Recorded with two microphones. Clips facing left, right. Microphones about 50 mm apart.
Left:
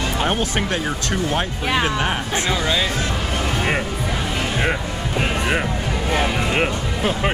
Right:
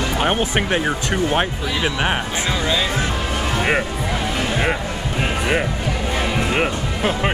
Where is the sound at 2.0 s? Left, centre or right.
Right.